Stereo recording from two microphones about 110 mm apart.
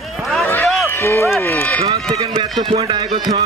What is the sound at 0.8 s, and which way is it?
Speech, 25° left (ahead or behind).